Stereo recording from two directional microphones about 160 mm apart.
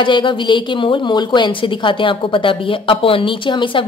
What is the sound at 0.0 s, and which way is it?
Speech, 30° left (ahead or behind).